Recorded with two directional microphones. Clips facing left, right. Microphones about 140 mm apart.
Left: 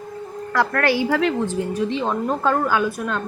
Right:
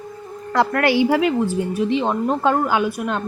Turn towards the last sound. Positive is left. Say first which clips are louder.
# right 1 dB
turn(degrees=-25)  # may be behind; listen again after turning